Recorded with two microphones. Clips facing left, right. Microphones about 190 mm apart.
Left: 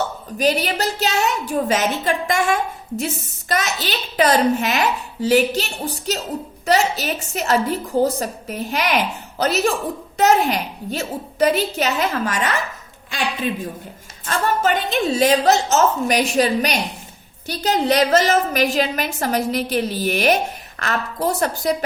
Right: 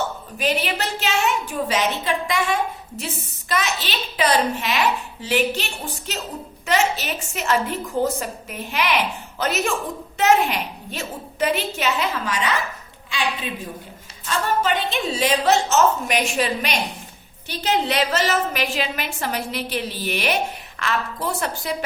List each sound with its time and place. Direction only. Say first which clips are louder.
0.3 s a woman's voice: left 4 dB; 40° left (ahead or behind)
14.3 s a woman's voice: left 2 dB; 45° left (ahead or behind)